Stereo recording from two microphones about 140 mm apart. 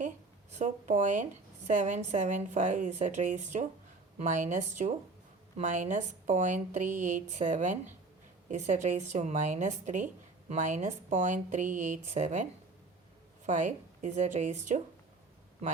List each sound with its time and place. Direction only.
0.5 s a woman's voice: 60° right (ahead or behind)